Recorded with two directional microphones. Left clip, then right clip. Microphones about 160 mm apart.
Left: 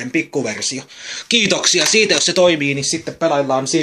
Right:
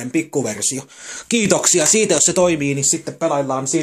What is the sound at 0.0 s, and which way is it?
Speech, 10° right (ahead or behind).